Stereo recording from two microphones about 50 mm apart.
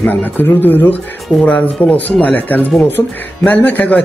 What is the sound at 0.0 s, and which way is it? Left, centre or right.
Speech, left.